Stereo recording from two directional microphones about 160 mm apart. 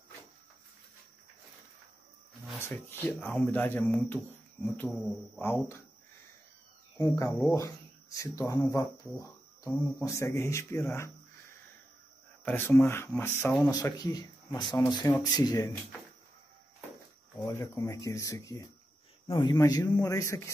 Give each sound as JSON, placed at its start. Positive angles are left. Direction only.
{"t": 2.9, "sound": "speech", "side_deg": 10}
{"t": 7.0, "sound": "speech", "side_deg": 20}
{"t": 13.7, "sound": "speech", "side_deg": 25}
{"t": 17.4, "sound": "speech", "side_deg": 20}